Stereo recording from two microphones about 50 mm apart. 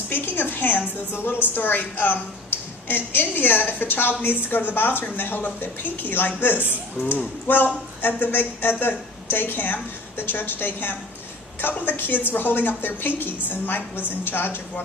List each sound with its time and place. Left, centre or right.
0.1 s a woman's voice: left